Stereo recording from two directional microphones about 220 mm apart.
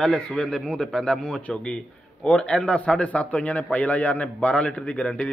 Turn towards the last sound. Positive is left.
turn(degrees=5)  # may be behind; listen again after turning